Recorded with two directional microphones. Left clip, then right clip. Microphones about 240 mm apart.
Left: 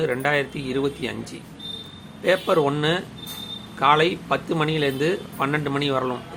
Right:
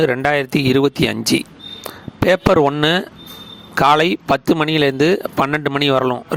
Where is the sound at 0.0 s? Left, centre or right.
Right.